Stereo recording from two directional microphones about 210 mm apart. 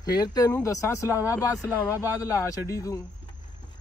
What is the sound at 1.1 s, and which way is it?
Speech, 10° right (ahead or behind).